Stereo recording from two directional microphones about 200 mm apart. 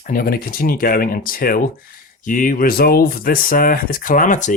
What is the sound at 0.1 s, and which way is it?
Speech, 45° left (ahead or behind).